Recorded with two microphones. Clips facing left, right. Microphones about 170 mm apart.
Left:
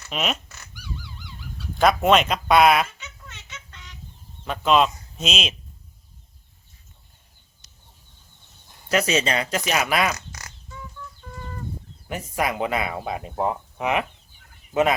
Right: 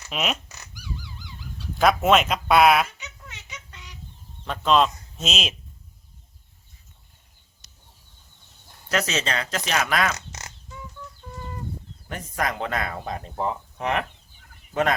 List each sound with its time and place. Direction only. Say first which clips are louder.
0.1 s speech: left 1 dB; centre (ahead or behind)
1.8 s speech: left 1 dB; centre (ahead or behind)
3.2 s a sound: right 1 dB; 10° right (ahead or behind)
4.4 s speech: left 1 dB; 5° left (ahead or behind)
8.9 s speech: left 4 dB; 10° left (ahead or behind)
10.2 s music: right 1 dB; 25° right (ahead or behind)
12.0 s speech: left 2 dB; 10° left (ahead or behind)